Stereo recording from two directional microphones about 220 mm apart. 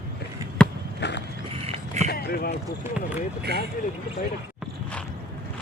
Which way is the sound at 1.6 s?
30° right (ahead or behind).